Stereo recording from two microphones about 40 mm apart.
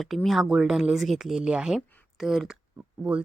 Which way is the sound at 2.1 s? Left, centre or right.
Centre.